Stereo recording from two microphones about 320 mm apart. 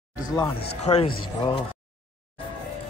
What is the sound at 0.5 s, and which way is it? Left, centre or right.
A man's voice, centre.